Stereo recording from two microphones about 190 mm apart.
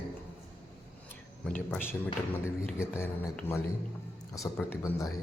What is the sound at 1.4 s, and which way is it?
Speech, 10° left (ahead or behind).